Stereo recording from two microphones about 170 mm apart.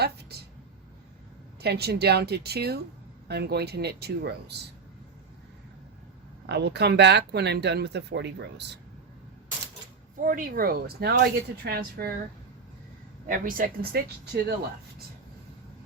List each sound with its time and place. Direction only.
0.0 s a sound: 70° right (ahead or behind)
1.6 s speech: 70° right (ahead or behind)
6.5 s speech: 80° right
10.2 s speech: 55° right (ahead or behind)
13.2 s speech: 55° right (ahead or behind)